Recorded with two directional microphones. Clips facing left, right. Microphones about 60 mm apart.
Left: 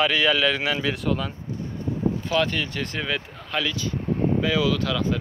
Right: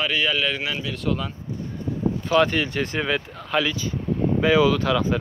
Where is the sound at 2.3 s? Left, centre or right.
Right.